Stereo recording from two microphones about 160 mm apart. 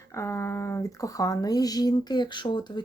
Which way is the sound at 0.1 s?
15° left (ahead or behind).